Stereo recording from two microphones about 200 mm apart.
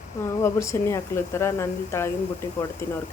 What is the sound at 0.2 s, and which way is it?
A woman's voice, 15° left (ahead or behind).